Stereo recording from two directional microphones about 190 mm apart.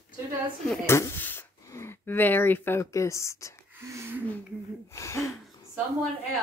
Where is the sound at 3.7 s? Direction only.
10° right (ahead or behind).